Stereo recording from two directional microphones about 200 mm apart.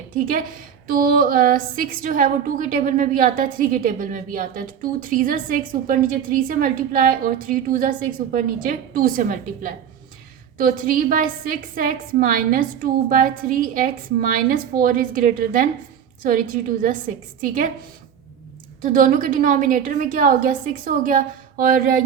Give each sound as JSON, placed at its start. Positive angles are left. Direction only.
{"t": 0.9, "sound": "a woman's voice", "side_deg": -45}
{"t": 18.8, "sound": "a woman's voice", "side_deg": -40}